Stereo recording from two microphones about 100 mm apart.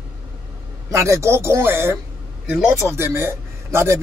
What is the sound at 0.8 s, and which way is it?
A man's voice, 30° right (ahead or behind).